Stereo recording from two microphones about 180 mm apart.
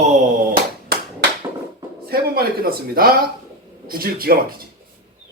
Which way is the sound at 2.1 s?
55° right (ahead or behind).